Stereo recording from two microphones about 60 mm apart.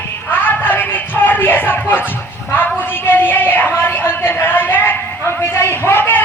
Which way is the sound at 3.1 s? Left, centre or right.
Left.